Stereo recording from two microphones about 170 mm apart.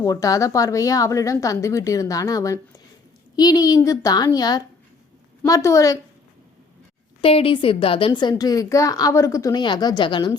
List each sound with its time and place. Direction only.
0.0 s a woman's voice: 20° left (ahead or behind)
7.2 s a woman's voice: 35° left (ahead or behind)